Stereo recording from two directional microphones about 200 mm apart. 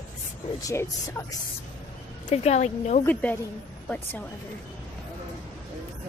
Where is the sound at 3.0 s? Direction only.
5° left (ahead or behind).